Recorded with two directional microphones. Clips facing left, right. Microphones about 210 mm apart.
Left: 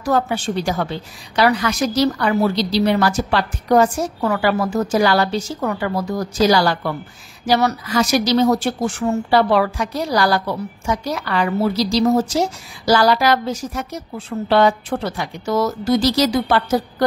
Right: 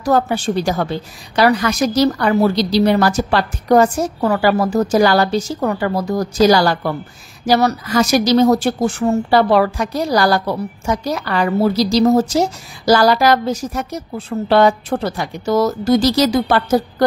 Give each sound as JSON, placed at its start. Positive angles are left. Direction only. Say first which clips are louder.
{"t": 0.0, "sound": "a woman's voice", "louder": "right 3 dB", "side_deg": -40}